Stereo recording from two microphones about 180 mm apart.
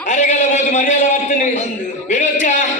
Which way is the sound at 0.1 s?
40° left (ahead or behind).